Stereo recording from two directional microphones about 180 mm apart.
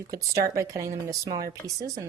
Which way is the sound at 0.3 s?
15° right (ahead or behind).